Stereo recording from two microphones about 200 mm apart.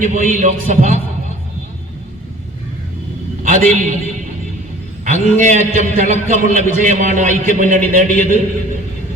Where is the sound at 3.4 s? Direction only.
40° right (ahead or behind).